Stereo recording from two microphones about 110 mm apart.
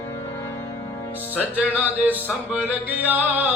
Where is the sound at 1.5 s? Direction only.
15° right (ahead or behind).